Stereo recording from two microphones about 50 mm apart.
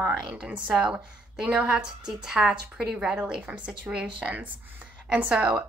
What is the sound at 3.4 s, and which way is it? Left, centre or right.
A woman's voice, right.